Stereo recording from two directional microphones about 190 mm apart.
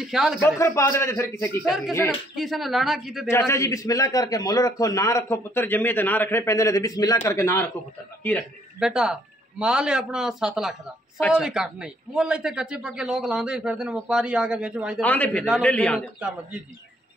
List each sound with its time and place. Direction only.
0.0 s a man's voice: centre (ahead or behind)
0.4 s a man's voice: 15° left (ahead or behind)
1.6 s a man's voice: centre (ahead or behind)
3.3 s a man's voice: 15° left (ahead or behind)
8.7 s a man's voice: 5° right (ahead or behind)
15.0 s a man's voice: 10° left (ahead or behind)